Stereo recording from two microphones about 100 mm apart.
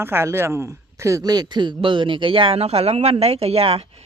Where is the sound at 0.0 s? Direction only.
25° right (ahead or behind).